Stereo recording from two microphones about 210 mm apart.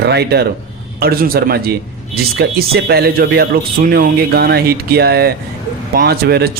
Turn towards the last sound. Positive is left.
turn(degrees=-50)  # may be behind; listen again after turning